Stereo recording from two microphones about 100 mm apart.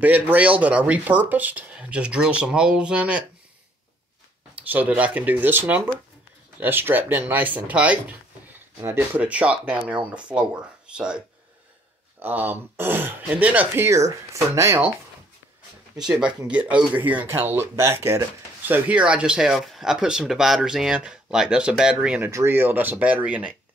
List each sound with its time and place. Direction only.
0.0 s speech: 15° right (ahead or behind)
4.6 s speech: 15° right (ahead or behind)
12.2 s speech: 20° right (ahead or behind)
13.8 s speech: 30° right (ahead or behind)
16.0 s speech: 10° right (ahead or behind); by 18.2 s 25° right (ahead or behind)
18.7 s speech: 10° right (ahead or behind)
22.3 s speech: 25° right (ahead or behind)